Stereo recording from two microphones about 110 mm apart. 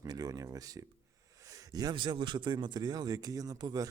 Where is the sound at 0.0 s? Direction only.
35° right (ahead or behind).